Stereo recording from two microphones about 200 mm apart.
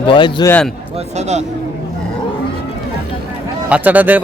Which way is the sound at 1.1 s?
35° right (ahead or behind).